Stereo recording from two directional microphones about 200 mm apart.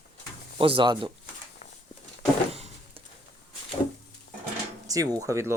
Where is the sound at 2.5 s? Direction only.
30° right (ahead or behind).